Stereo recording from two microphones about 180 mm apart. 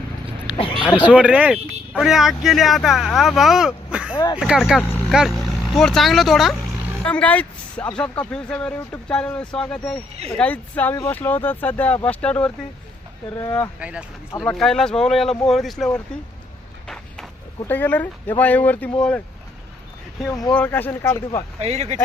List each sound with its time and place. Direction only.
0.4 s a sound: 25° left (ahead or behind)
0.9 s speech: 5° right (ahead or behind)
4.1 s speech: 25° left (ahead or behind)
4.4 s speech: 5° right (ahead or behind)
4.8 s speech: 10° left (ahead or behind)
5.1 s speech: centre (ahead or behind)
13.4 s speech: 20° left (ahead or behind)
13.7 s speech: 5° right (ahead or behind)
16.8 s vehicle: 5° left (ahead or behind)
17.7 s speech: 10° left (ahead or behind)
20.5 s speech: 10° left (ahead or behind)
21.6 s speech: 40° right (ahead or behind)